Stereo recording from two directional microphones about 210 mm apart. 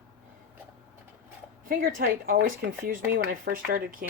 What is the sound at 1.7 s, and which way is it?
Speech, 40° right (ahead or behind).